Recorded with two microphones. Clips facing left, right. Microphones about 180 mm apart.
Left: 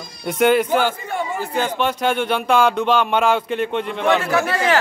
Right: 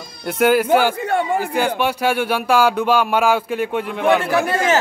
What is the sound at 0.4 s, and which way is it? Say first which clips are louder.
Speech: right 1 dB; 5° right (ahead or behind).